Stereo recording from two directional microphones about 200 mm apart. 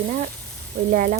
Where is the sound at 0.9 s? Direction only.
45° right (ahead or behind).